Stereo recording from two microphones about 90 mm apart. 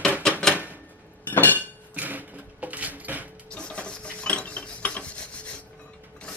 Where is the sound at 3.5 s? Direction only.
10° left (ahead or behind).